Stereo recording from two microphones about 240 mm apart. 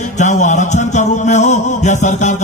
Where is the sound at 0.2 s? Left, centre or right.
Left.